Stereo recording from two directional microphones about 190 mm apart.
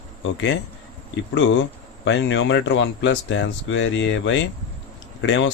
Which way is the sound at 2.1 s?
75° left (ahead or behind).